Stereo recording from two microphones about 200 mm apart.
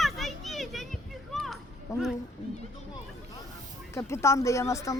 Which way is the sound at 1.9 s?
15° left (ahead or behind).